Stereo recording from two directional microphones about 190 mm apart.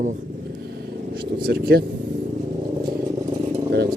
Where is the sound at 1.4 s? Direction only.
55° right (ahead or behind).